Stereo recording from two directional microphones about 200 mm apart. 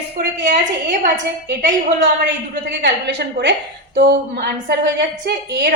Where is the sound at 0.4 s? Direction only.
40° right (ahead or behind).